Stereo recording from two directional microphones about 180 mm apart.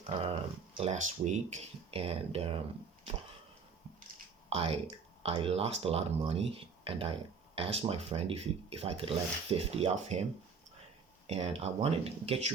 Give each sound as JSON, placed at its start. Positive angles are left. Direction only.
{"t": 0.8, "sound": "speech", "side_deg": -40}
{"t": 4.4, "sound": "speech", "side_deg": -35}
{"t": 11.3, "sound": "speech", "side_deg": -35}